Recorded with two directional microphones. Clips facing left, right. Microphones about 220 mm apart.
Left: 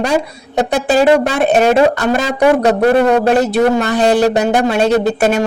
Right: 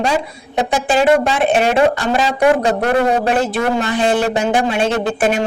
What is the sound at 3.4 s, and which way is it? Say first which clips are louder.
Speech: left 5 dB; 40° left (ahead or behind).